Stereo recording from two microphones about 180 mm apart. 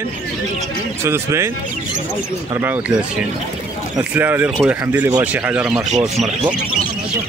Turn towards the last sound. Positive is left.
turn(degrees=-5)  # may be behind; listen again after turning